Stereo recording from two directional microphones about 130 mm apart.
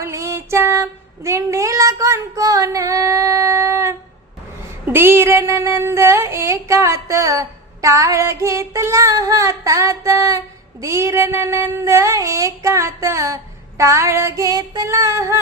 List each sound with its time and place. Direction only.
0.0 s child singing: 25° right (ahead or behind)